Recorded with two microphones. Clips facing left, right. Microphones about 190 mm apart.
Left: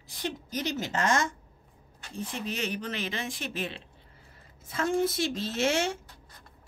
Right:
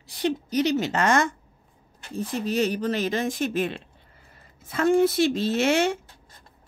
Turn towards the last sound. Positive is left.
turn(degrees=-65)  # may be behind; listen again after turning